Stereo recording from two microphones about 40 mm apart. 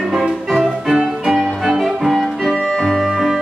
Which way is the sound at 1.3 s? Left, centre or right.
Centre.